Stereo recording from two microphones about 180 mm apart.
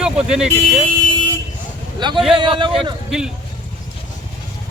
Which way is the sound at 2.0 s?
25° right (ahead or behind).